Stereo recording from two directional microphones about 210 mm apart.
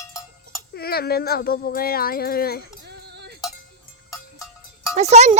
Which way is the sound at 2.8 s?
50° right (ahead or behind).